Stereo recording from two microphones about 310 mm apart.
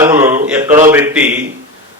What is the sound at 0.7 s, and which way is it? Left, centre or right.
Speech, right.